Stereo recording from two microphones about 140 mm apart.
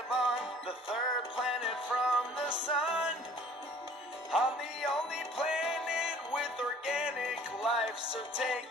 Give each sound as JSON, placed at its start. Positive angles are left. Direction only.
{"t": 0.1, "sound": "music", "side_deg": 0}
{"t": 4.3, "sound": "music", "side_deg": -5}